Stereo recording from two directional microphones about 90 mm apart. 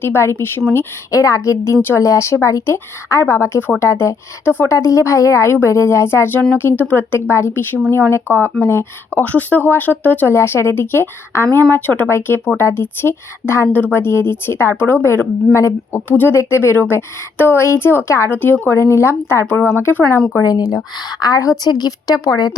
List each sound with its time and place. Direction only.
0.0 s a woman's voice: 25° left (ahead or behind)
1.8 s a woman's voice: 25° left (ahead or behind)
20.4 s a woman's voice: 45° left (ahead or behind)